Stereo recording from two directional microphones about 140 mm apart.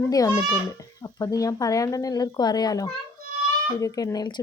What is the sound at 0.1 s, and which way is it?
A child's voice, 25° left (ahead or behind).